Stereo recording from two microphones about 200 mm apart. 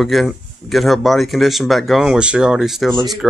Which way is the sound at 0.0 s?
Centre (ahead or behind).